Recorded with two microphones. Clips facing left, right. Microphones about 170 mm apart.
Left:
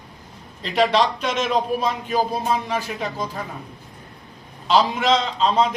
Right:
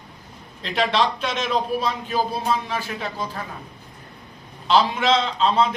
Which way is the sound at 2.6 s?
15° left (ahead or behind).